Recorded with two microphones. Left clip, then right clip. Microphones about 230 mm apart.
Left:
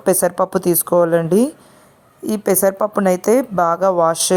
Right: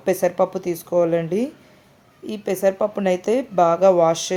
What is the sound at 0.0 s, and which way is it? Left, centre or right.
Speech, left.